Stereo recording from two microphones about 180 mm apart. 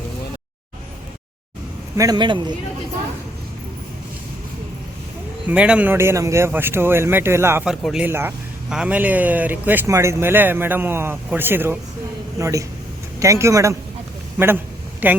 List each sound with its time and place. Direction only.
2.0 s a man's voice: 20° right (ahead or behind)
5.5 s speech: 5° right (ahead or behind)